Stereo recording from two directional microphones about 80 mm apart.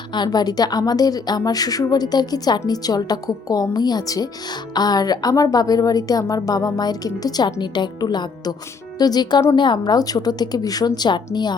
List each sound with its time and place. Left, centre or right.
0.3 s a woman's voice: left
7.6 s a woman's voice: left
9.6 s a woman's voice: left